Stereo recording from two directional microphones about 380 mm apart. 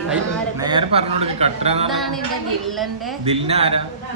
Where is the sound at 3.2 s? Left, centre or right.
Centre.